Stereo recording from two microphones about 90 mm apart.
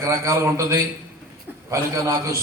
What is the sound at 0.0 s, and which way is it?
A man's voice, 35° right (ahead or behind).